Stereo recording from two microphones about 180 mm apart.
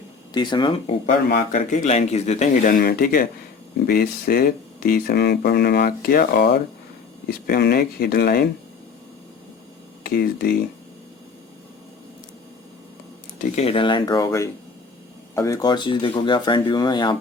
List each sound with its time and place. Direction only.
0.3 s speech: 25° left (ahead or behind)
1.4 s speech: 40° left (ahead or behind); by 8.4 s 60° left (ahead or behind)
10.0 s speech: 60° left (ahead or behind)
13.4 s speech: 35° left (ahead or behind)